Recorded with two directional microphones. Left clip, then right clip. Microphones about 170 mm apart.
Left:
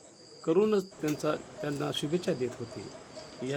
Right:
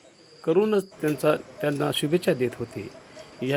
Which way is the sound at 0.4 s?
5° right (ahead or behind).